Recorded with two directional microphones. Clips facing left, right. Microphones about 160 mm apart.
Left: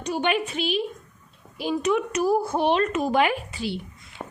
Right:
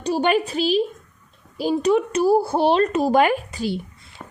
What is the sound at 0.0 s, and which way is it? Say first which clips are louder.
A woman's voice: right 5 dB; 35° right (ahead or behind).